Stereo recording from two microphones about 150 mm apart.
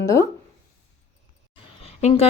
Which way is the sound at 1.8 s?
40° left (ahead or behind).